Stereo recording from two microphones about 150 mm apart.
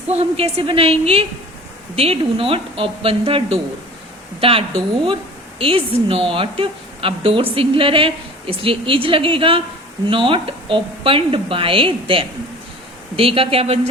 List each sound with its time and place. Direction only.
0.1 s a woman's voice: 45° right (ahead or behind)